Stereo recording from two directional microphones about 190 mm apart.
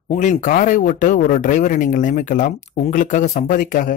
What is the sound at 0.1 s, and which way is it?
A man's voice, 40° left (ahead or behind).